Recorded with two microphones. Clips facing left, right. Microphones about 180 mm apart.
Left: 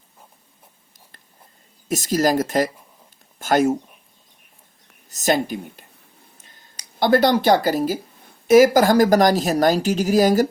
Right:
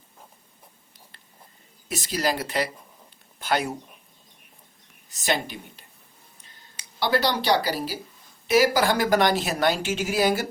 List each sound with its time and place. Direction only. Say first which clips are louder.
1.9 s speech: left 8 dB; 45° left (ahead or behind)
5.0 s speech: left 7 dB; 45° left (ahead or behind)